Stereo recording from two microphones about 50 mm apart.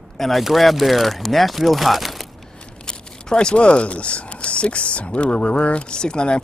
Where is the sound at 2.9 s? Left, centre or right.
Centre.